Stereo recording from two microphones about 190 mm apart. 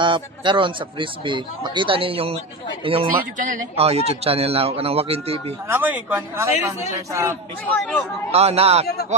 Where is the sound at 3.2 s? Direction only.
45° right (ahead or behind).